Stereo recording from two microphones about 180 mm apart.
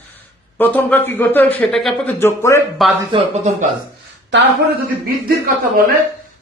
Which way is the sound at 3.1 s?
30° right (ahead or behind).